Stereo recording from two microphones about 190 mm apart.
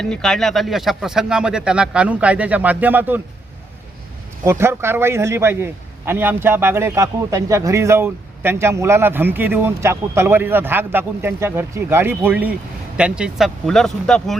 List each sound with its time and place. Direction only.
0.0 s speech: 5° left (ahead or behind)
4.4 s a man's voice: 15° right (ahead or behind)